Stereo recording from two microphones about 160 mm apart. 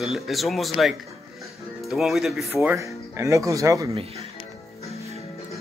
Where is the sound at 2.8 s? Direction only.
20° right (ahead or behind).